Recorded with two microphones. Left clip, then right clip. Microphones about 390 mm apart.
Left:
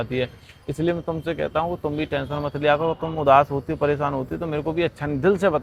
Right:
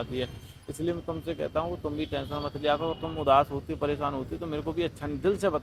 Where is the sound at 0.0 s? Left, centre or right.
Left.